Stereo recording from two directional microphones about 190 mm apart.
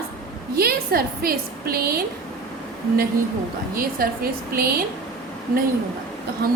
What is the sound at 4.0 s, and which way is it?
Speech, 50° right (ahead or behind).